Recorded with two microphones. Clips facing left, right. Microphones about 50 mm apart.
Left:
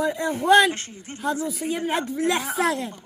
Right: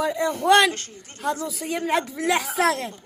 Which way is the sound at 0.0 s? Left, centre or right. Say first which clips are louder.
Right 1 dB; right.